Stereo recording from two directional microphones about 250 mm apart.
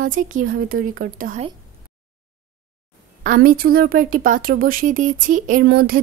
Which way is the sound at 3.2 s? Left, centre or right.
Right.